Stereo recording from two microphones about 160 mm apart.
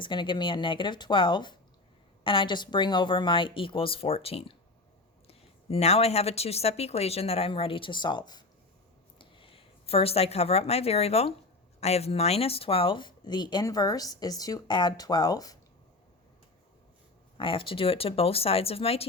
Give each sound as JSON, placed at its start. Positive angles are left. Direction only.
{"t": 0.0, "sound": "a woman's voice", "side_deg": 30}
{"t": 17.3, "sound": "a woman's voice", "side_deg": 35}